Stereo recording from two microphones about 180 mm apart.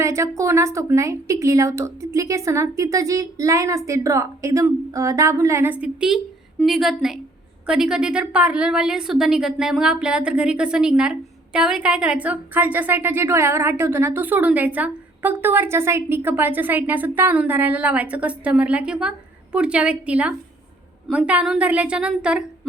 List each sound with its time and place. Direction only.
0.0 s a woman's voice: 15° right (ahead or behind)